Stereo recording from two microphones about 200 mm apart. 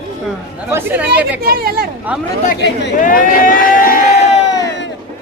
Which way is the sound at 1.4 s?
50° right (ahead or behind).